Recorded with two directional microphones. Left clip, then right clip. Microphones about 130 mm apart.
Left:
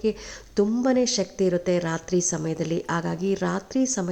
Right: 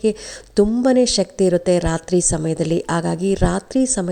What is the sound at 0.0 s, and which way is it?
A woman's voice, 45° right (ahead or behind).